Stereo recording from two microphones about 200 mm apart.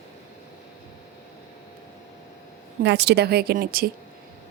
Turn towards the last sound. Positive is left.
turn(degrees=-50)  # may be behind; listen again after turning